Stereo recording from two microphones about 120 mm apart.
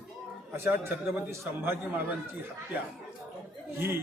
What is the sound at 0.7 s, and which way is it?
A man's voice, 20° right (ahead or behind).